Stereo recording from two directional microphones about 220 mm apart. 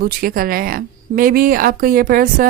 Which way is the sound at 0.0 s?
40° right (ahead or behind).